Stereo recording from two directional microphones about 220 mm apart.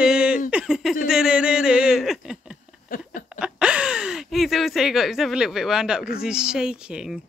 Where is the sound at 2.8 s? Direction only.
40° left (ahead or behind).